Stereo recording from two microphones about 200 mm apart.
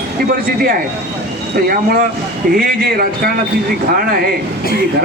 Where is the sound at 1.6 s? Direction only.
50° right (ahead or behind).